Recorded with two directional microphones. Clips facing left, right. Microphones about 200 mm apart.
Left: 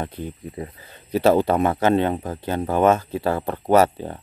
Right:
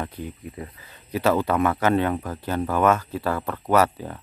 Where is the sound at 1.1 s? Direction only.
30° left (ahead or behind).